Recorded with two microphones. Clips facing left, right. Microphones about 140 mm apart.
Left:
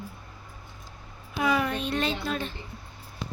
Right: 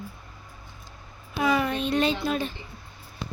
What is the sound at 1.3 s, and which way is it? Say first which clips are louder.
A child's voice: right 2 dB; 5° right (ahead or behind).